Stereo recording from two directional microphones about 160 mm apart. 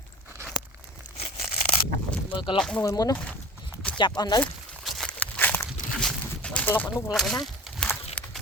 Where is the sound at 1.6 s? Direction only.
35° left (ahead or behind).